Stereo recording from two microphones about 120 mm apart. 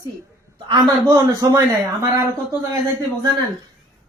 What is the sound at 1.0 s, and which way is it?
Speech, 30° right (ahead or behind).